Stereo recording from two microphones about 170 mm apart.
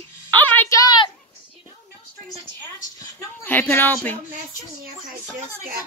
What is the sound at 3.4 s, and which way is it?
Speech, 10° left (ahead or behind).